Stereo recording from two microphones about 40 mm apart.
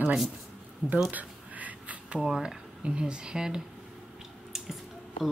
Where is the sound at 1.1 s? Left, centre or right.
Right.